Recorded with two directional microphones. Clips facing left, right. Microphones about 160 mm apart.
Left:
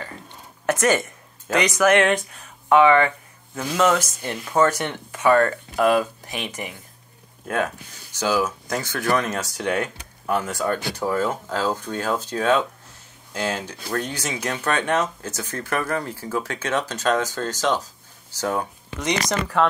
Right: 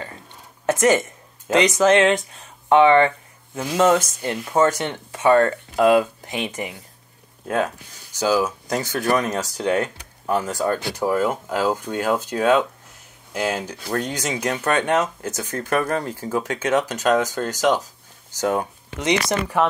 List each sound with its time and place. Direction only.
0.7 s a woman's voice: 20° right (ahead or behind)
8.2 s speech: 15° right (ahead or behind)
9.6 s speech: 35° right (ahead or behind)
11.0 s speech: 15° right (ahead or behind)